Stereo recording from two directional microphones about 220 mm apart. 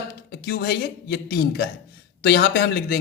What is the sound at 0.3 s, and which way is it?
Speech, 45° left (ahead or behind).